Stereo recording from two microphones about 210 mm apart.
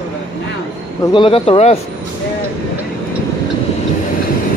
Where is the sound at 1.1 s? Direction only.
25° left (ahead or behind).